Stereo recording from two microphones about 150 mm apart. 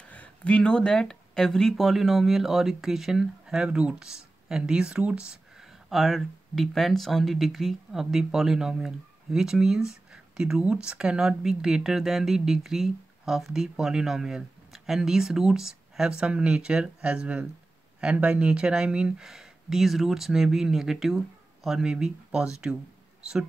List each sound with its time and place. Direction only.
0.1 s speech: 10° left (ahead or behind)